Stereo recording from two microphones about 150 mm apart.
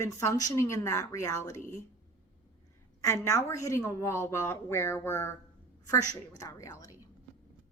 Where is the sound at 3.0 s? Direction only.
20° left (ahead or behind).